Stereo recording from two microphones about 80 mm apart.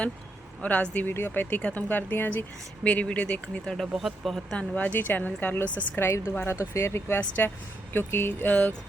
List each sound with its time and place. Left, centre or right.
0.6 s speech: centre
3.8 s speech: centre
4.5 s speech: centre
6.0 s speech: left
7.2 s speech: left